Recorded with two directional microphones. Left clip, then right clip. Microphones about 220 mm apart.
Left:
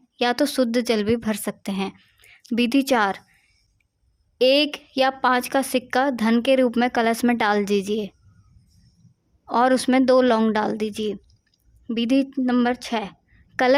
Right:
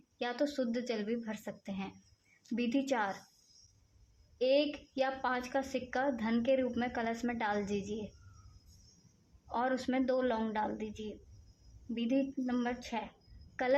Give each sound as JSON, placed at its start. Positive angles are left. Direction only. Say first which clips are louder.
{"t": 0.2, "sound": "a woman's voice", "louder": "left 14 dB", "side_deg": 45}
{"t": 4.4, "sound": "a woman's voice", "louder": "left 12 dB", "side_deg": 45}
{"t": 9.5, "sound": "a woman's voice", "louder": "left 15 dB", "side_deg": 45}